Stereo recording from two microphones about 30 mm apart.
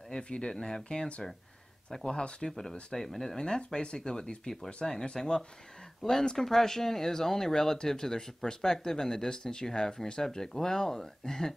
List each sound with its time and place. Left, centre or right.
0.1 s speech: left
0.6 s speech: centre
0.8 s speech: left
2.4 s speech: centre
3.4 s speech: left
4.6 s speech: left
5.1 s speech: left
6.0 s speech: centre
6.3 s speech: centre